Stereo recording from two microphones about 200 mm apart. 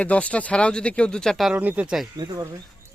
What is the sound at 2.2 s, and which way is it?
Speech, 20° right (ahead or behind).